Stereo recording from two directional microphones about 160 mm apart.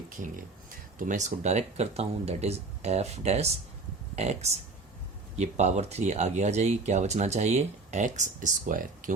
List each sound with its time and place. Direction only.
0.7 s speech: 55° right (ahead or behind)